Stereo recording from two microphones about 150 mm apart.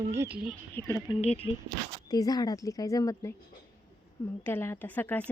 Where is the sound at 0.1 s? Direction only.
15° right (ahead or behind).